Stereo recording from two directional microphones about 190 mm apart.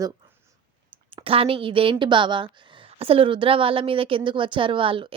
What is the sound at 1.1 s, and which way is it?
A woman's voice, 30° right (ahead or behind).